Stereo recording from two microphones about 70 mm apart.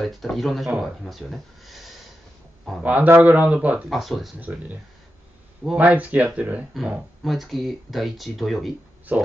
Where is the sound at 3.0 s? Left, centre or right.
Right.